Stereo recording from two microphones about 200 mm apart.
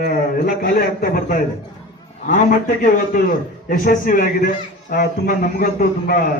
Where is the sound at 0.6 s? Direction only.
45° left (ahead or behind).